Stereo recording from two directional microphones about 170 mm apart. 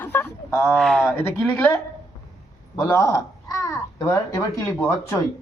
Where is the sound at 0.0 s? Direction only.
10° left (ahead or behind).